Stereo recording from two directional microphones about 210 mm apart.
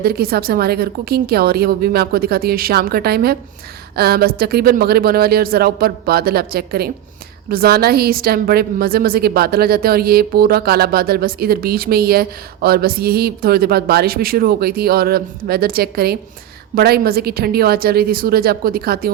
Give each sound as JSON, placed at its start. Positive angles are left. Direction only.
{"t": 0.0, "sound": "a woman's voice", "side_deg": -45}